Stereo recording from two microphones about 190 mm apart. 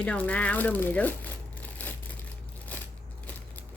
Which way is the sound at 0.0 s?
5° left (ahead or behind).